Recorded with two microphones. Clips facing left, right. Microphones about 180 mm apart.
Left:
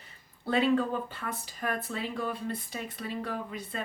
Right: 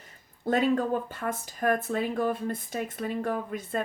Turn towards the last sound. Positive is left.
turn(degrees=-50)  # may be behind; listen again after turning